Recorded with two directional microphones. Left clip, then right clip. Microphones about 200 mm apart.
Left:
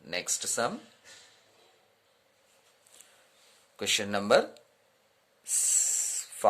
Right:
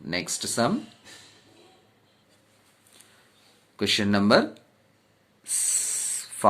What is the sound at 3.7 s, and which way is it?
Speech, 20° left (ahead or behind).